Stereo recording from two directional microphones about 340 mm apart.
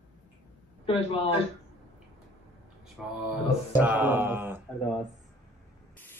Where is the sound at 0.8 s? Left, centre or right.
Centre.